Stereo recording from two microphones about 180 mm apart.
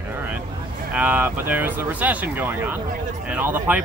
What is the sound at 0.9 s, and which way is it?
Speech, 10° right (ahead or behind).